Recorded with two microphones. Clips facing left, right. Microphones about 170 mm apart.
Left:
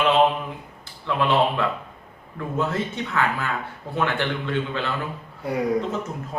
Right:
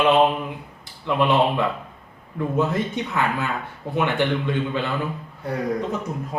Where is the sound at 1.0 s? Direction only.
15° right (ahead or behind).